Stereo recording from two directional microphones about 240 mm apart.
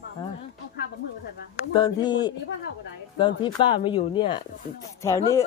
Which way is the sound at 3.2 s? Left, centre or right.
Centre.